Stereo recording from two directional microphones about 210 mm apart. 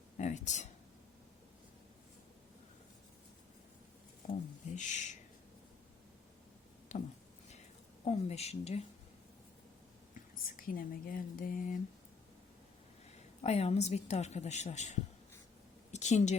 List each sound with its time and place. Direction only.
0.2 s speech: 35° left (ahead or behind)
4.2 s a sound: 35° left (ahead or behind)
4.7 s speech: 35° left (ahead or behind)
6.9 s a sound: 35° left (ahead or behind)
8.0 s speech: 30° left (ahead or behind)
10.2 s speech: 40° left (ahead or behind)
13.4 s a woman's voice: 30° left (ahead or behind)